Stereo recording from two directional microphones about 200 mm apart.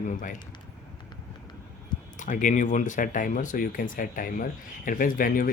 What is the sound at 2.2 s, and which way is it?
Speech, 40° left (ahead or behind).